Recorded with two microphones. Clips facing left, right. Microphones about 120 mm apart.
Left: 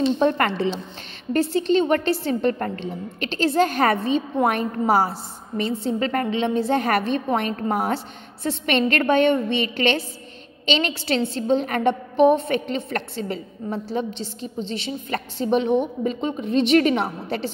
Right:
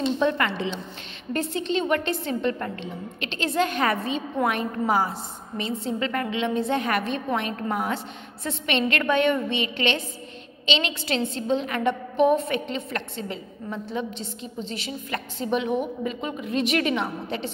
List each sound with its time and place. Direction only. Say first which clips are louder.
0.2 s a woman's voice: left 4 dB; 40° left (ahead or behind)
11.0 s a woman's voice: left 4 dB; 30° left (ahead or behind)
11.9 s a woman's voice: left 4 dB; 30° left (ahead or behind)
12.9 s a woman's voice: left 4 dB; 45° left (ahead or behind)
13.8 s a woman's voice: left 4 dB; 30° left (ahead or behind)